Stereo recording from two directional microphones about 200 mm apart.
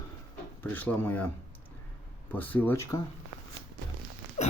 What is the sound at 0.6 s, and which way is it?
Speech, 10° left (ahead or behind).